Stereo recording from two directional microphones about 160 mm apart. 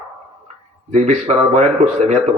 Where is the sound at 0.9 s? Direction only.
45° right (ahead or behind).